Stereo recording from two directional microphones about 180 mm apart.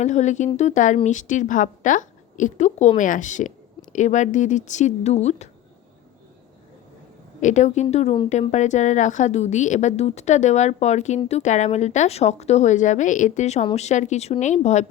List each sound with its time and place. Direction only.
0.0 s a woman's voice: 40° left (ahead or behind)
7.4 s a woman's voice: 40° left (ahead or behind)